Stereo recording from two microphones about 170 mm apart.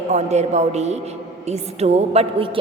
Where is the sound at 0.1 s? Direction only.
40° right (ahead or behind).